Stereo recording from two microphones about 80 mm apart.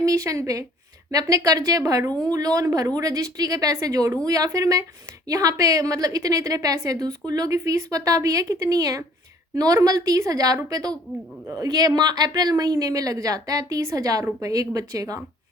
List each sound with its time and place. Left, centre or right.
0.0 s a woman's voice: right